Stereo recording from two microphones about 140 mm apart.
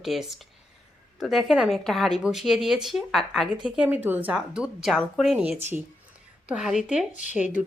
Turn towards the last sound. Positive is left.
turn(degrees=-10)  # may be behind; listen again after turning